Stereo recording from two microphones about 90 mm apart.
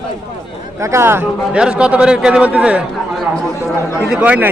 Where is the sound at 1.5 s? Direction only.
10° right (ahead or behind).